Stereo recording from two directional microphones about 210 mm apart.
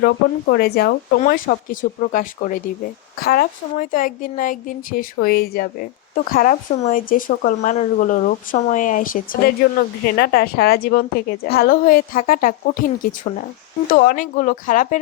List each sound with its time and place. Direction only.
0.0 s a woman's voice: 50° left (ahead or behind)